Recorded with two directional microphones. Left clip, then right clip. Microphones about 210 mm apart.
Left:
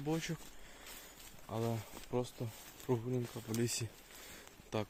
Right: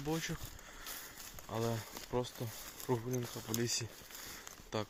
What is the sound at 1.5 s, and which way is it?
Speech, 15° left (ahead or behind).